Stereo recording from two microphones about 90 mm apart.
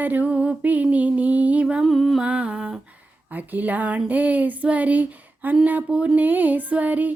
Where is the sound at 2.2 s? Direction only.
15° right (ahead or behind).